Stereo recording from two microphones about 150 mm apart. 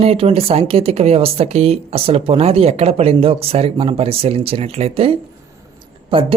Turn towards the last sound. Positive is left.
turn(degrees=-35)  # may be behind; listen again after turning